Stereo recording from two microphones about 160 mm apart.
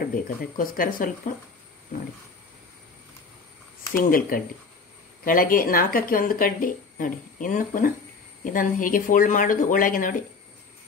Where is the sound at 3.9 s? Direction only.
60° left (ahead or behind).